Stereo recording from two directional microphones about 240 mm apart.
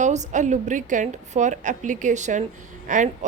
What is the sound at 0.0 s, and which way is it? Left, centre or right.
A woman's voice, right.